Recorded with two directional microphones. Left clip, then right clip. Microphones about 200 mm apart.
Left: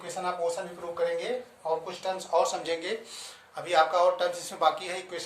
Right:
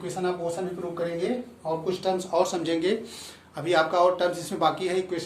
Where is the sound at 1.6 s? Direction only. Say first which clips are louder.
Right 4 dB; 5° left (ahead or behind).